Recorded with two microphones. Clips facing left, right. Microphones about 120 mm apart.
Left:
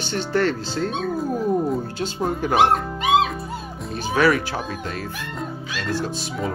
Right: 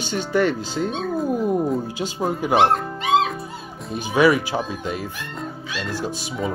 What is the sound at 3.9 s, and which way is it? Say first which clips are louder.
Speech: right 2 dB; 15° right (ahead or behind).